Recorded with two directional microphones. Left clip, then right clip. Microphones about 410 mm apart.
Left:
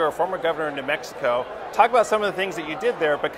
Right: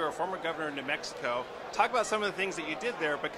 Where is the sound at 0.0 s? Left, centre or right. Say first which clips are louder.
Left 10 dB; centre.